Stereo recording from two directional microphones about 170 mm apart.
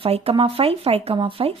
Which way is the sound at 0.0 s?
35° right (ahead or behind).